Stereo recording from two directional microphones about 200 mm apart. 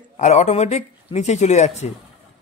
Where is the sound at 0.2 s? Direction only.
35° left (ahead or behind).